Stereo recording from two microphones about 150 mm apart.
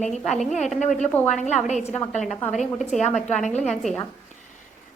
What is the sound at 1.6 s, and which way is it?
Speech, 50° left (ahead or behind).